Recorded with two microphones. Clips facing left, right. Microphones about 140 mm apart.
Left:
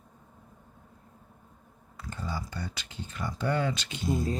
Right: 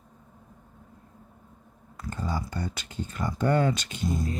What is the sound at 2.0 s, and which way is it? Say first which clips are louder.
Speech: right 4 dB; 45° right (ahead or behind).